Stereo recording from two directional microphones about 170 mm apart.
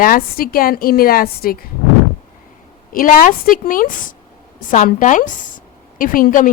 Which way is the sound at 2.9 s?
55° left (ahead or behind).